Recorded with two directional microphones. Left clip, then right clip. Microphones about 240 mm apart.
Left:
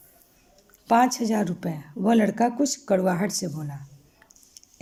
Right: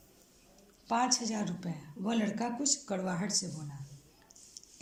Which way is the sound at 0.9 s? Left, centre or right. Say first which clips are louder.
Left 10 dB; left.